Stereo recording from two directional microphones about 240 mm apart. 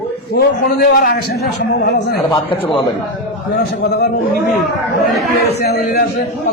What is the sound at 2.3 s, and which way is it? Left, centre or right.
Speech, left.